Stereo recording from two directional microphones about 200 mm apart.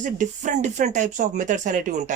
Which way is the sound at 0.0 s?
40° right (ahead or behind).